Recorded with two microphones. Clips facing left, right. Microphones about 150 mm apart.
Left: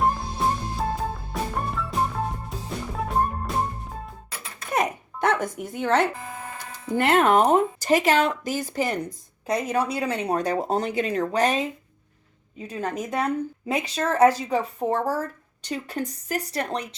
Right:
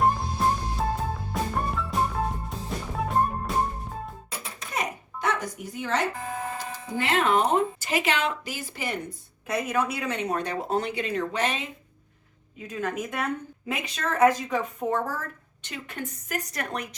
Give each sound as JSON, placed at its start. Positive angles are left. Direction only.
{"t": 0.0, "sound": "music", "side_deg": 0}
{"t": 3.1, "sound": "music", "side_deg": 0}
{"t": 4.7, "sound": "a sound", "side_deg": 55}
{"t": 6.9, "sound": "speech", "side_deg": 50}